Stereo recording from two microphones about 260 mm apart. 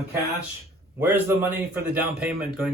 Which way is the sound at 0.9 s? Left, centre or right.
Centre.